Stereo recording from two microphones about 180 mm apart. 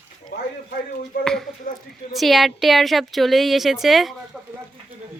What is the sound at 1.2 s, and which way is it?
A woman's voice, centre (ahead or behind).